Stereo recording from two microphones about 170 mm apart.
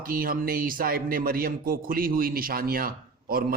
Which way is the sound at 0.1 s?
60° right (ahead or behind).